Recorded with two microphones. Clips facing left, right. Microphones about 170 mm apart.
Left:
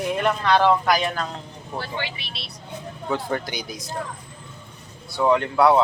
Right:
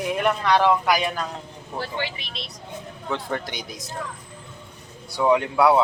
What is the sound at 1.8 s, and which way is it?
Speech, 40° right (ahead or behind).